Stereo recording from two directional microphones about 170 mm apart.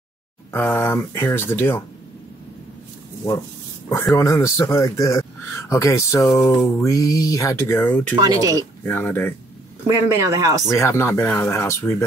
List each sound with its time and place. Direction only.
0.5 s speech: 15° left (ahead or behind)
4.1 s speech: 20° left (ahead or behind)
8.2 s speech: 20° right (ahead or behind)
8.8 s speech: 10° left (ahead or behind)
9.8 s speech: 15° right (ahead or behind)
10.7 s speech: 15° left (ahead or behind)